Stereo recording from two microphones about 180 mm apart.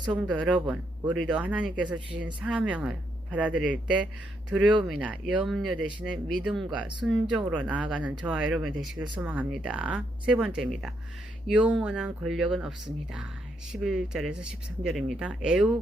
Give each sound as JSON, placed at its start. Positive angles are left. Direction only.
{"t": 0.2, "sound": "speech", "side_deg": -5}
{"t": 13.7, "sound": "speech", "side_deg": 0}